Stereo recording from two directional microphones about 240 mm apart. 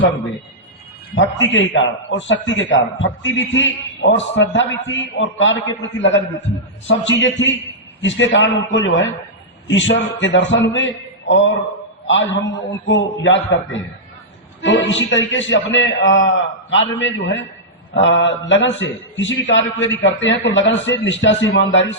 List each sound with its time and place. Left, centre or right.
1.1 s a man's voice: left